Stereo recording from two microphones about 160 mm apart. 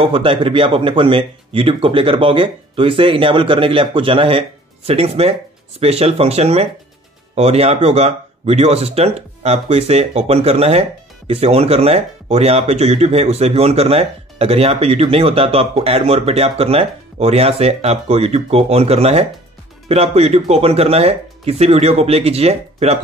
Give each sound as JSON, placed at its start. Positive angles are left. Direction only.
{"t": 0.0, "sound": "speech", "side_deg": -35}